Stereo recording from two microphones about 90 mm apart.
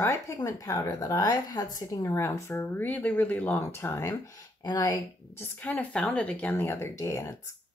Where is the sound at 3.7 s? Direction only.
30° left (ahead or behind).